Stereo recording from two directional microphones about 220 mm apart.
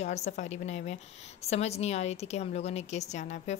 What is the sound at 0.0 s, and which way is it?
A woman's voice, 30° left (ahead or behind).